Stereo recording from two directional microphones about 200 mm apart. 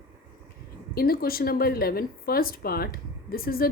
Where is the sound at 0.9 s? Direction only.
50° left (ahead or behind).